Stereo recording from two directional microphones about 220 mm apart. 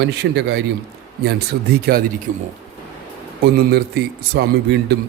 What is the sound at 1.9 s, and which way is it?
Speech, 40° right (ahead or behind).